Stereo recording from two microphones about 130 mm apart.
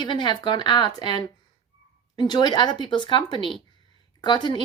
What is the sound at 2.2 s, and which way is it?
A woman's voice, 35° left (ahead or behind).